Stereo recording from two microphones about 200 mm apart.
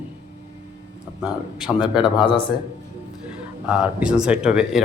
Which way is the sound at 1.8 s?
5° right (ahead or behind).